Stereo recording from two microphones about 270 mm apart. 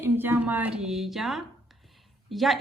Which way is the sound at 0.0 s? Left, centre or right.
Centre.